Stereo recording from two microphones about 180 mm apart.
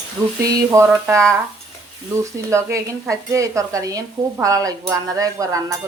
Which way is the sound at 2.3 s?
15° right (ahead or behind).